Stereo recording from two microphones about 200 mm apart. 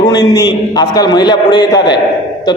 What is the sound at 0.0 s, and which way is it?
A man's voice, 20° left (ahead or behind).